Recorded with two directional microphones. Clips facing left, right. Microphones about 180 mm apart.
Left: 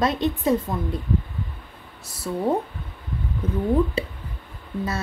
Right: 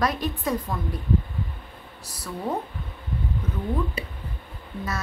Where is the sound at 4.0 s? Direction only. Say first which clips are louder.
Left 7 dB; 30° left (ahead or behind).